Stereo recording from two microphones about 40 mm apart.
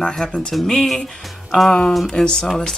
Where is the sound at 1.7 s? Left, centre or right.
Centre.